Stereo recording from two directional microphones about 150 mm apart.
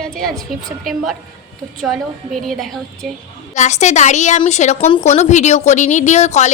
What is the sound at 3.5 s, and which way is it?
A woman's voice, 50° left (ahead or behind).